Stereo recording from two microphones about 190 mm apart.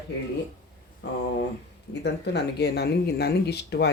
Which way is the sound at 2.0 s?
60° left (ahead or behind).